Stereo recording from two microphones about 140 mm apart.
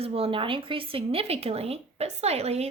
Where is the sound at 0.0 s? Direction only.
45° right (ahead or behind).